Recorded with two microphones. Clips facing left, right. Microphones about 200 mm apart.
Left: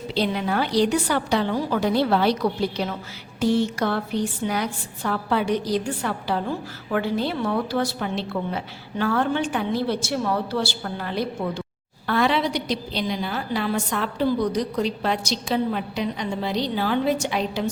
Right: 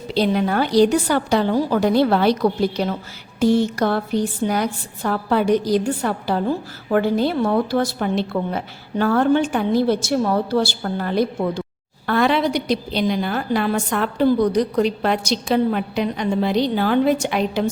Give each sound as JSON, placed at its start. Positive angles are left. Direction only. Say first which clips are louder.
{"t": 0.1, "sound": "a woman's voice", "louder": "right 5 dB", "side_deg": -45}